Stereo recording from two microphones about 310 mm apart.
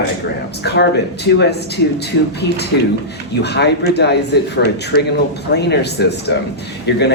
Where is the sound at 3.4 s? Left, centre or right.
Left.